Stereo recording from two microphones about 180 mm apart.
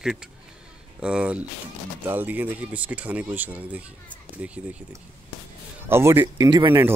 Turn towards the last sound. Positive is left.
turn(degrees=-25)  # may be behind; listen again after turning